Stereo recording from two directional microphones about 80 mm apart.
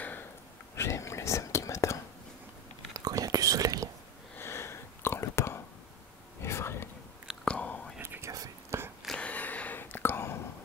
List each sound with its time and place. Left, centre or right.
0.0 s a sound: left
0.7 s whispering: left
2.9 s whispering: right
4.4 s a sound: left
6.4 s whispering: left
7.4 s whispering: centre
8.0 s whispering: right
8.3 s whispering: right
9.2 s whispering: centre